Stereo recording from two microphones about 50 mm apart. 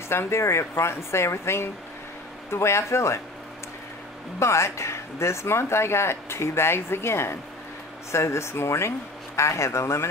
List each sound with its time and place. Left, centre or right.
0.1 s speech: left
4.4 s speech: left
8.1 s speech: left